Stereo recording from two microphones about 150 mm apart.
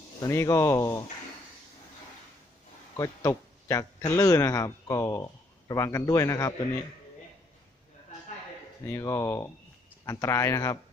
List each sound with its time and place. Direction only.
0.2 s speech: 20° left (ahead or behind)
2.9 s speech: 20° left (ahead or behind)
8.9 s speech: 20° left (ahead or behind)